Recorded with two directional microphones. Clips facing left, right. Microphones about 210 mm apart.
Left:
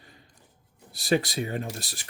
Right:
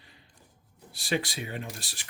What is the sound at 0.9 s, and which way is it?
Speech, 40° left (ahead or behind).